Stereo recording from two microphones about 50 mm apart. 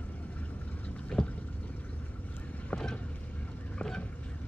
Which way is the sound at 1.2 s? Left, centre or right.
Centre.